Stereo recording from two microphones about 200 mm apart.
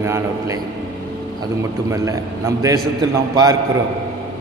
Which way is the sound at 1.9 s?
15° right (ahead or behind).